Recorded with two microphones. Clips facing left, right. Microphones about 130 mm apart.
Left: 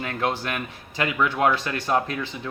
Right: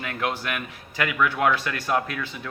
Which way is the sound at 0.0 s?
30° left (ahead or behind).